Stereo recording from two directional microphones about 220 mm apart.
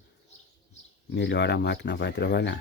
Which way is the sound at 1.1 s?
55° left (ahead or behind).